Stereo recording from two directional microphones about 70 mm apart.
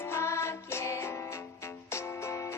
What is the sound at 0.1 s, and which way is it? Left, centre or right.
Music, left.